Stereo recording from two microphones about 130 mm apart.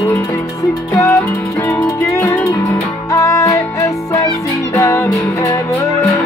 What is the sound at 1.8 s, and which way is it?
Music, 15° left (ahead or behind).